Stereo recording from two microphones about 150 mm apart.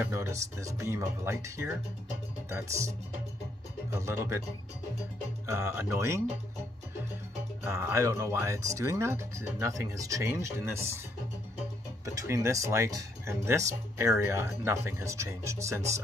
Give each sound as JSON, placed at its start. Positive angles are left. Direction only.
{"t": 0.0, "sound": "speech", "side_deg": -20}
{"t": 3.9, "sound": "speech", "side_deg": -20}
{"t": 5.5, "sound": "speech", "side_deg": -20}
{"t": 7.6, "sound": "speech", "side_deg": -15}
{"t": 12.0, "sound": "speech", "side_deg": -20}